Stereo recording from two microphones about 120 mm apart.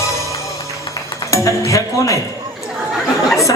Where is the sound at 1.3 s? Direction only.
25° left (ahead or behind).